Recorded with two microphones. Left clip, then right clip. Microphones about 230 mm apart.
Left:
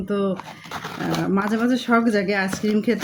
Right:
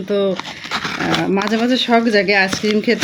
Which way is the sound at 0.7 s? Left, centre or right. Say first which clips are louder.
Right 8 dB; right.